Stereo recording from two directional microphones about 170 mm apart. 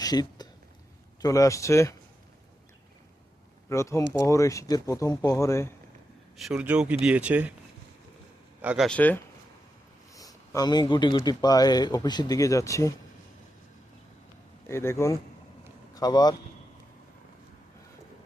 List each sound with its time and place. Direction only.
0.0 s a sound: 25° left (ahead or behind)
1.2 s speech: 20° left (ahead or behind)
3.7 s a man's voice: 15° left (ahead or behind)
6.3 s speech: centre (ahead or behind)
8.6 s speech: 5° right (ahead or behind)
8.9 s a man's voice: 10° left (ahead or behind)
10.2 s speech: 20° left (ahead or behind)
14.7 s a man's voice: 15° left (ahead or behind)